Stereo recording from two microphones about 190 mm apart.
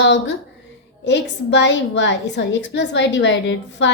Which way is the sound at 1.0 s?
65° left (ahead or behind).